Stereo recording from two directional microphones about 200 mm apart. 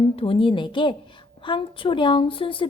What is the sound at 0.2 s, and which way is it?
Speech, 25° left (ahead or behind).